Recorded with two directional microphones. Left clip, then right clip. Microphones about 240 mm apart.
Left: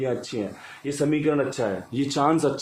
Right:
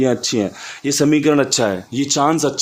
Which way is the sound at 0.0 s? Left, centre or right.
Right.